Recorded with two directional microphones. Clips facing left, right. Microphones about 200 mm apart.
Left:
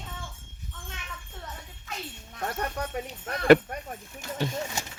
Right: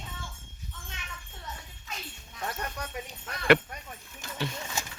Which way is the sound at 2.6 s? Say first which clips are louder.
Left 5 dB; 45° left (ahead or behind).